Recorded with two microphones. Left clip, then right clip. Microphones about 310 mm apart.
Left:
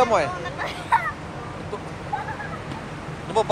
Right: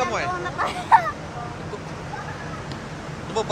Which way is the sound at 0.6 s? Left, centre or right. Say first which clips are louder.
Right 5 dB; right.